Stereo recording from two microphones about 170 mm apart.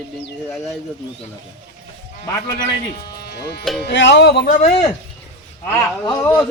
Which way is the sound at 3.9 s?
90° left.